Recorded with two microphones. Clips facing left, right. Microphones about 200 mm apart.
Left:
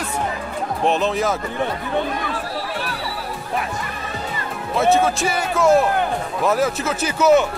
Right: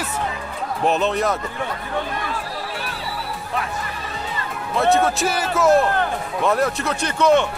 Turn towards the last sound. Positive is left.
turn(degrees=5)  # may be behind; listen again after turning